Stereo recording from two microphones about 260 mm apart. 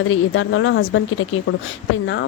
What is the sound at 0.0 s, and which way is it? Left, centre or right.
A woman's voice, left.